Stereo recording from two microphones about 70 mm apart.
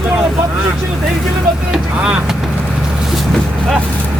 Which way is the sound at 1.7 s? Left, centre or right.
Centre.